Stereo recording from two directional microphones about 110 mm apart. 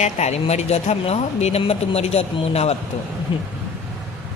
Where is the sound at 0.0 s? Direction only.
90° left; by 2.7 s 70° left (ahead or behind).